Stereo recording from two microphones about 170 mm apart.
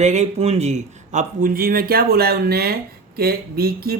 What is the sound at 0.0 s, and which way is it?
A man's voice, 40° right (ahead or behind).